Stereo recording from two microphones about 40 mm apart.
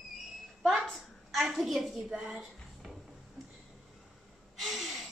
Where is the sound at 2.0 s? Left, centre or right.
Centre.